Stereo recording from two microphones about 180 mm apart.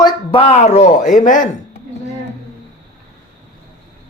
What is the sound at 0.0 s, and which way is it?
Speech, 25° left (ahead or behind).